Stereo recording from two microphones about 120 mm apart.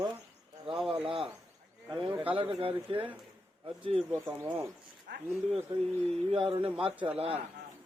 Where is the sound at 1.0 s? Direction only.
50° right (ahead or behind).